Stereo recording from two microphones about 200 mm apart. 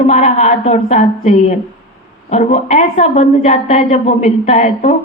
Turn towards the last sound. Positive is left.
turn(degrees=35)  # may be behind; listen again after turning